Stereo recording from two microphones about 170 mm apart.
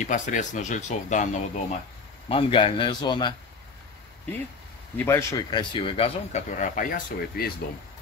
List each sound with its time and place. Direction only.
0.0 s speech: 45° left (ahead or behind)
2.2 s speech: 30° left (ahead or behind)
4.9 s speech: 15° left (ahead or behind); by 6.4 s 35° left (ahead or behind)
6.6 s speech: 50° left (ahead or behind)